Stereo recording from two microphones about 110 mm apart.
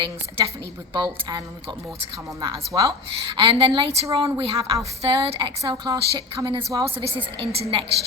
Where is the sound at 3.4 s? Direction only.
60° right (ahead or behind).